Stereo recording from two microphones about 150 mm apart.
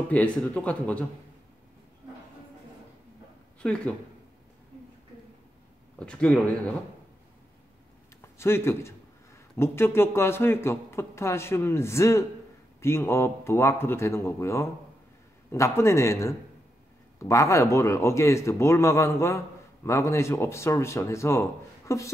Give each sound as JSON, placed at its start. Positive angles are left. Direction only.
{"t": 0.1, "sound": "a man's voice", "side_deg": 10}
{"t": 3.6, "sound": "a man's voice", "side_deg": 5}
{"t": 5.9, "sound": "a man's voice", "side_deg": 5}
{"t": 8.2, "sound": "a man's voice", "side_deg": 15}